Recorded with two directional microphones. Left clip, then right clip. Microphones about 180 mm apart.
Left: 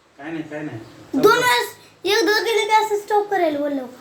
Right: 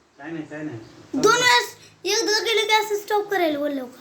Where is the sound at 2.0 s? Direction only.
25° left (ahead or behind).